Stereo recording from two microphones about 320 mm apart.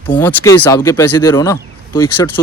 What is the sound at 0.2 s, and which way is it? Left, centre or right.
Speech, centre.